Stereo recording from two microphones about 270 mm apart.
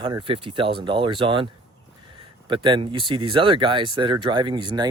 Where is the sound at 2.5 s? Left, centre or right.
Centre.